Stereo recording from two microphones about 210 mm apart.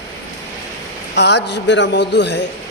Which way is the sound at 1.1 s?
55° left (ahead or behind).